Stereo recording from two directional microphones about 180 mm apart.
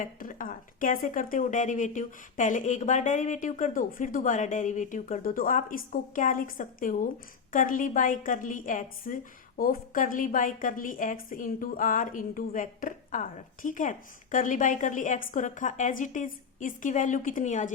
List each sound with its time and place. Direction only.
0.0 s a woman's voice: 50° left (ahead or behind)